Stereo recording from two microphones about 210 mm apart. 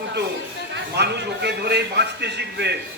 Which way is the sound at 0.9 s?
55° right (ahead or behind).